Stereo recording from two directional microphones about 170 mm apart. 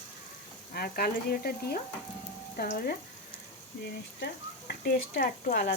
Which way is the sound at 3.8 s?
75° left (ahead or behind).